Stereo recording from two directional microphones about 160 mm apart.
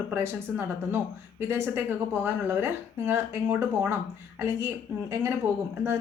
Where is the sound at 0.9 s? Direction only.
15° right (ahead or behind).